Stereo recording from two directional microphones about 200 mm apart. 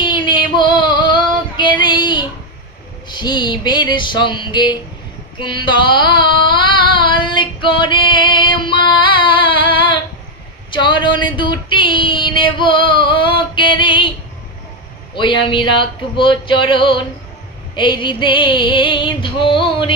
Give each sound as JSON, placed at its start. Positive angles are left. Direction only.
{"t": 0.0, "sound": "female singing", "side_deg": 25}
{"t": 3.1, "sound": "music", "side_deg": 20}
{"t": 5.4, "sound": "female singing", "side_deg": 25}
{"t": 10.7, "sound": "a sound", "side_deg": 25}
{"t": 15.5, "sound": "music", "side_deg": 25}